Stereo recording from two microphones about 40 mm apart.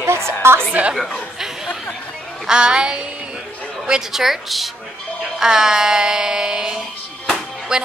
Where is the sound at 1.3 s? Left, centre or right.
Centre.